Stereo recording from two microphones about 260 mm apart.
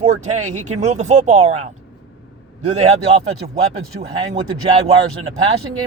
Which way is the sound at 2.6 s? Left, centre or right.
Right.